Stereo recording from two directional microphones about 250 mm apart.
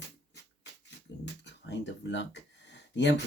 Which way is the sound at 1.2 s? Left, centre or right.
Left.